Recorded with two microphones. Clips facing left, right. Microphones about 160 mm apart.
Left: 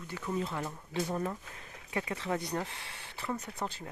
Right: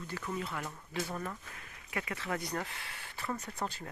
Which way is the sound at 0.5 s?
15° left (ahead or behind).